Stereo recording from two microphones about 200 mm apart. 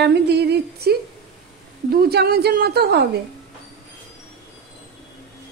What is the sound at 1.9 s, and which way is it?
A woman's voice, 50° right (ahead or behind).